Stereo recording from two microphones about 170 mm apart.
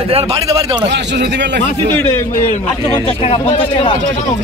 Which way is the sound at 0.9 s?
90° right.